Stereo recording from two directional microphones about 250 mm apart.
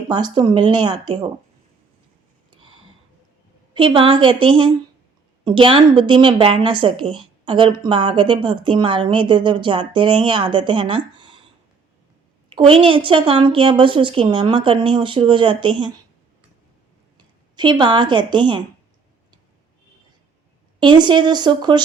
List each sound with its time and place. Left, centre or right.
0.1 s speech: centre
3.8 s a woman's voice: right
12.5 s a woman's voice: right
17.6 s speech: centre
20.7 s speech: centre